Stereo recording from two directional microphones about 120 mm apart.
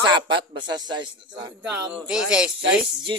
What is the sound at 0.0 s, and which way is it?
A man's voice, 40° right (ahead or behind).